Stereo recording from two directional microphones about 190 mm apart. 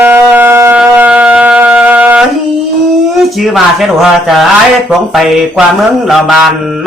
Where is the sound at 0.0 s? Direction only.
10° right (ahead or behind).